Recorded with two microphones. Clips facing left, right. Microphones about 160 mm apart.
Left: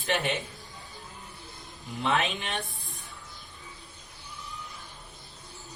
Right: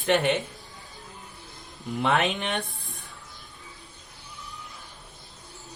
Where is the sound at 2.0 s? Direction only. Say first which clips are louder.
Right 3 dB; 60° right (ahead or behind).